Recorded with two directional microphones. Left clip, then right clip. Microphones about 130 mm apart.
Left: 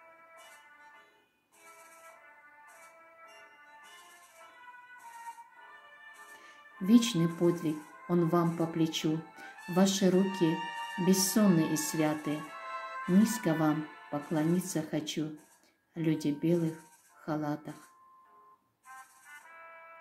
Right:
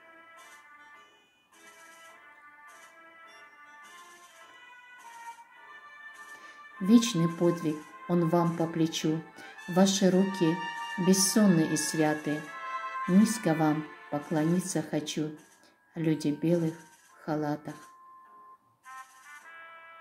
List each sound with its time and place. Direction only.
6.3 s speech: 5° right (ahead or behind)
10.6 s music: 15° left (ahead or behind)
11.1 s speech: 5° right (ahead or behind)
12.4 s music: 35° left (ahead or behind)
13.2 s speech: 5° right (ahead or behind)